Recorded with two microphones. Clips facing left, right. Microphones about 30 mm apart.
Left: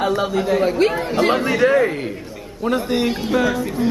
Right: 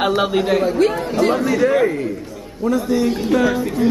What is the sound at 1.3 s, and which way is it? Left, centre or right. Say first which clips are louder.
A man's voice: left 2 dB; left.